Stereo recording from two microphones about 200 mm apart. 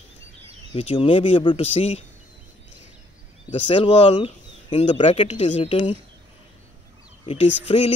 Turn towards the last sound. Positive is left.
turn(degrees=30)  # may be behind; listen again after turning